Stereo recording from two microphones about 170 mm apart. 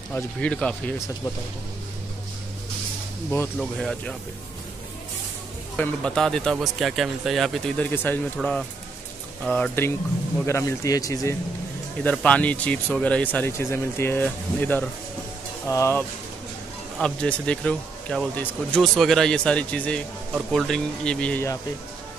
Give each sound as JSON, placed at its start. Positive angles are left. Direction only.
{"t": 0.1, "sound": "speech", "side_deg": 5}
{"t": 0.9, "sound": "speech", "side_deg": 15}
{"t": 3.3, "sound": "speech", "side_deg": 5}
{"t": 5.8, "sound": "speech", "side_deg": 5}
{"t": 12.0, "sound": "speech", "side_deg": 5}
{"t": 17.0, "sound": "speech", "side_deg": 5}